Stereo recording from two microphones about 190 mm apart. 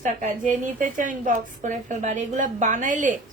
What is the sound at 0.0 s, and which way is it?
A woman's voice, 40° right (ahead or behind).